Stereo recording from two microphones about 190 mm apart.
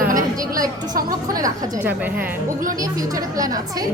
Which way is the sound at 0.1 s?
45° right (ahead or behind).